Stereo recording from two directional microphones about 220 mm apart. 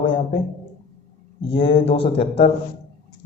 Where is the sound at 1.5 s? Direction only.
25° left (ahead or behind).